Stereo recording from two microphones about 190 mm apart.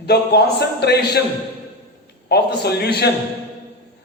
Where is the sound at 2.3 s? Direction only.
60° left (ahead or behind).